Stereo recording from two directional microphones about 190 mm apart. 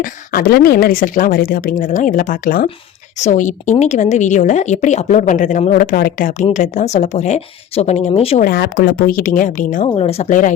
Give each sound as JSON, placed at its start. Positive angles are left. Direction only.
{"t": 0.0, "sound": "speech", "side_deg": 50}
{"t": 8.4, "sound": "speech", "side_deg": 55}
{"t": 9.9, "sound": "speech", "side_deg": 30}